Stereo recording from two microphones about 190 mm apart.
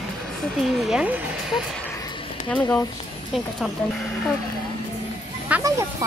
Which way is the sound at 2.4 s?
10° left (ahead or behind).